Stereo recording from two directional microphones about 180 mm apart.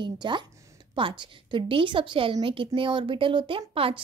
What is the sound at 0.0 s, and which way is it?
Speech, 25° right (ahead or behind).